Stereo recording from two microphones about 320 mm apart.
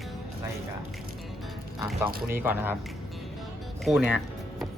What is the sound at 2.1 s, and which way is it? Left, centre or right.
Speech, right.